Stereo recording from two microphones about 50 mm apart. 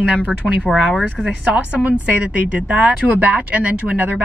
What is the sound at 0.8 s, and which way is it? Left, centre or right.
Speech, centre.